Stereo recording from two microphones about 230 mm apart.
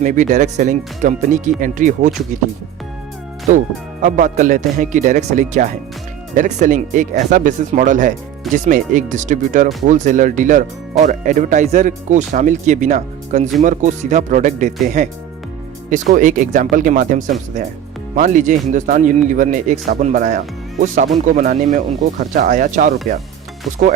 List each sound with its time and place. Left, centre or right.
0.0 s speech: right
4.0 s speech: right